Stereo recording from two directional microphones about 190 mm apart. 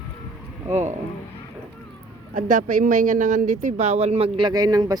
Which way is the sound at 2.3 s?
45° right (ahead or behind).